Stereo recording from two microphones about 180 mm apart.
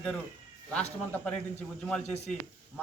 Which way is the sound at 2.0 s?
35° left (ahead or behind).